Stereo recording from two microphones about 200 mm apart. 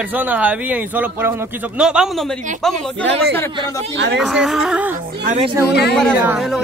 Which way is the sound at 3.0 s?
65° right (ahead or behind).